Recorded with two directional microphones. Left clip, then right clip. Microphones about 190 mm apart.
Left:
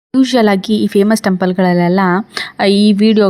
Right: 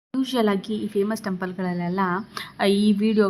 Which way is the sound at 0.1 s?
35° left (ahead or behind).